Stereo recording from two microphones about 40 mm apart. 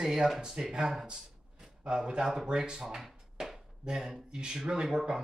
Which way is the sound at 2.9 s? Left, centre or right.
Centre.